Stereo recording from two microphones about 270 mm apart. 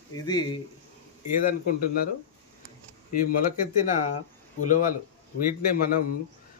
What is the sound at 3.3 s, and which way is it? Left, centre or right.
A man's voice, left.